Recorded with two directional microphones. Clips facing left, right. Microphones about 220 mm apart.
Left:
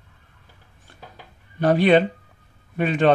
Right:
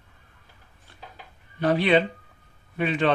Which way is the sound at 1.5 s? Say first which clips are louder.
Left 4 dB; 45° left (ahead or behind).